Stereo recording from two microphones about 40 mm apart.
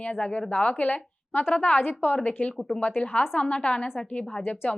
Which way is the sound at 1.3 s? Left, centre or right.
Left.